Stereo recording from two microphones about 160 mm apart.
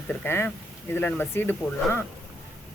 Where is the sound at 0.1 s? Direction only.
15° left (ahead or behind).